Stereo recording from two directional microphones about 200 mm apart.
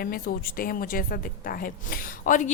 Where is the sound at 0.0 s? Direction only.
45° left (ahead or behind).